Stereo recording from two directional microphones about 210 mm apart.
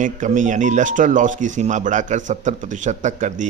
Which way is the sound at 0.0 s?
35° right (ahead or behind).